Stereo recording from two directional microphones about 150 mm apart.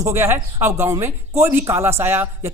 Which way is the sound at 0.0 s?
15° right (ahead or behind).